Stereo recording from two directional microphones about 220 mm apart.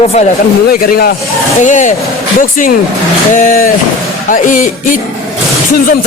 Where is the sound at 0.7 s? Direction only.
45° left (ahead or behind).